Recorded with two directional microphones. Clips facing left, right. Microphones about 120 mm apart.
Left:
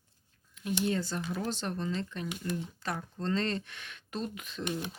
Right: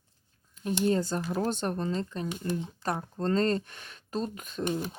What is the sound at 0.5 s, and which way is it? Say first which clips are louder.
Speech: right 4 dB; 40° right (ahead or behind).